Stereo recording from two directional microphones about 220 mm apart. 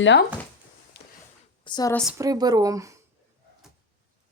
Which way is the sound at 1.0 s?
50° left (ahead or behind).